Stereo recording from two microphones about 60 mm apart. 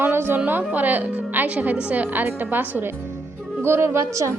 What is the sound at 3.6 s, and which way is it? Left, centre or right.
Speech, right.